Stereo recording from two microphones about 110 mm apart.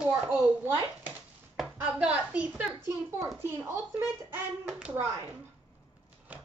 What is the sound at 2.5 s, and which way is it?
Speech, 10° right (ahead or behind).